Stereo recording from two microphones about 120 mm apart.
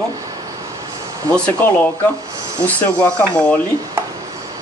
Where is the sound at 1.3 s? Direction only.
10° left (ahead or behind).